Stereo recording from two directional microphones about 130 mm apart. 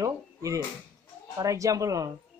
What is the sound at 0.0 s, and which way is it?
Speech, 25° right (ahead or behind).